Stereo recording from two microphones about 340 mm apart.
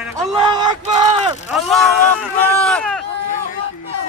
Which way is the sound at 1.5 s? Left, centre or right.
Centre.